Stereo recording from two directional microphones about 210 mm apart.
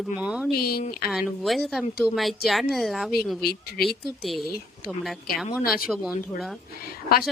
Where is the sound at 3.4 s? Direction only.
45° left (ahead or behind).